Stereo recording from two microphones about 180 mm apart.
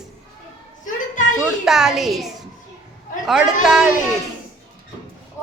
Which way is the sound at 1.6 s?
Centre (ahead or behind).